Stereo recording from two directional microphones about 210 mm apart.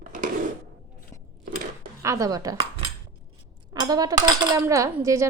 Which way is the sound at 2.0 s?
15° right (ahead or behind).